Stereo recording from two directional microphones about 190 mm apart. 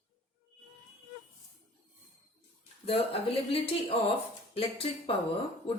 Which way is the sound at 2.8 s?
30° left (ahead or behind).